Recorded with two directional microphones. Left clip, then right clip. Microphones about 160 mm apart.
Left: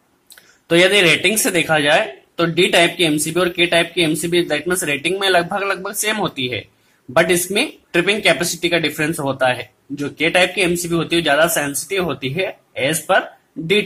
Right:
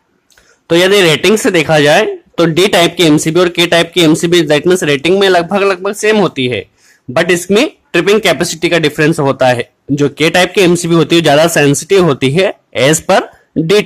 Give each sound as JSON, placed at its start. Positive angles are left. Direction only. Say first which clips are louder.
{"t": 0.7, "sound": "speech", "louder": "right 5 dB", "side_deg": -30}